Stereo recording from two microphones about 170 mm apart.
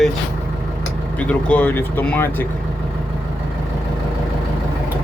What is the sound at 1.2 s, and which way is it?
Speech, 10° left (ahead or behind).